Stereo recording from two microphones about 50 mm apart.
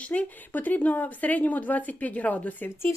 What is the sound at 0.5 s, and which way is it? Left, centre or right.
Speech, left.